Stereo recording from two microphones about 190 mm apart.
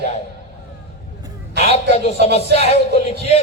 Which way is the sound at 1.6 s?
35° left (ahead or behind).